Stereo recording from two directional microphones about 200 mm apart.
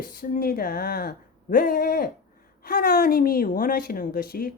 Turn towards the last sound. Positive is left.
turn(degrees=50)  # may be behind; listen again after turning